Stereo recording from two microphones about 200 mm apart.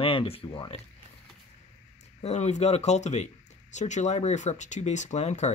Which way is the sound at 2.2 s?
35° left (ahead or behind).